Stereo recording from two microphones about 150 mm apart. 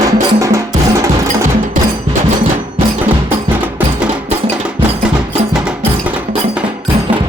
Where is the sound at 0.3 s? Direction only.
20° right (ahead or behind).